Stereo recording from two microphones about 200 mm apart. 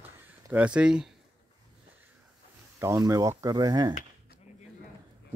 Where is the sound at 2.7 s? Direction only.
15° right (ahead or behind).